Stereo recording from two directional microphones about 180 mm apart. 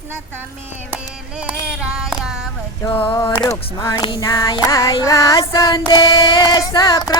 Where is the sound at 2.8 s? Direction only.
30° left (ahead or behind).